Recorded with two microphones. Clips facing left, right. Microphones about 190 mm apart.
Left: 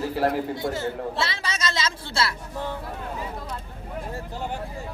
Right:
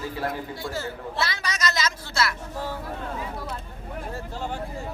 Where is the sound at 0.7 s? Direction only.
25° left (ahead or behind).